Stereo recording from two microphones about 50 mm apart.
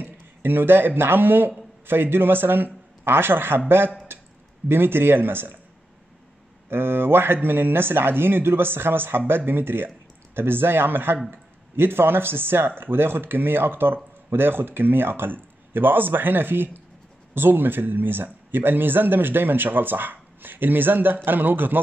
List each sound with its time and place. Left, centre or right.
0.0 s speech: right
6.7 s speech: right